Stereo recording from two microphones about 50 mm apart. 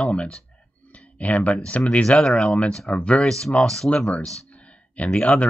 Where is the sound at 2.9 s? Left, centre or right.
Left.